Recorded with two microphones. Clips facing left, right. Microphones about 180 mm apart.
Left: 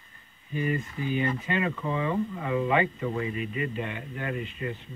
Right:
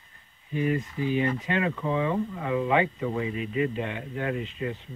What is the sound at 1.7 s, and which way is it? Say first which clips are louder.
Speech: right 2 dB; centre (ahead or behind).